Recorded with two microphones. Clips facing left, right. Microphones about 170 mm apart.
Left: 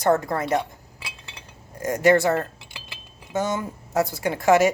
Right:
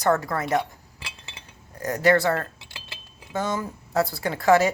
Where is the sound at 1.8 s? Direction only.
20° left (ahead or behind).